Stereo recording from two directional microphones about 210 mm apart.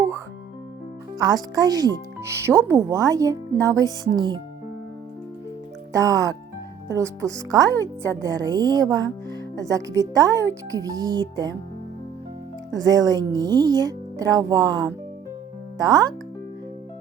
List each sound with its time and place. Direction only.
1.2 s speech: 20° right (ahead or behind)
5.9 s speech: 15° right (ahead or behind)
12.7 s speech: 15° right (ahead or behind)